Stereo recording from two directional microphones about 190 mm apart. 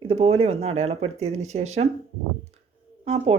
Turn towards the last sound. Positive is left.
turn(degrees=-35)  # may be behind; listen again after turning